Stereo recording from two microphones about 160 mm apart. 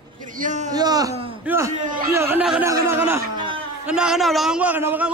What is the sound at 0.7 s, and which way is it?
A man's voice, 25° right (ahead or behind).